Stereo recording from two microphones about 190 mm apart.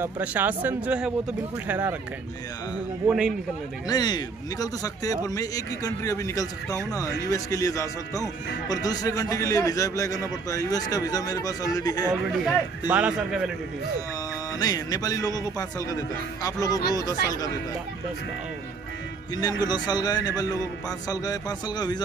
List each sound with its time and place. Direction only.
0.0 s speech: 10° right (ahead or behind)
3.1 s speech: 5° right (ahead or behind)
3.8 s a man's voice: 20° left (ahead or behind)
12.1 s speech: 5° left (ahead or behind)
12.8 s speech: 10° right (ahead or behind)
14.6 s a man's voice: 20° left (ahead or behind)
19.6 s a man's voice: 20° left (ahead or behind)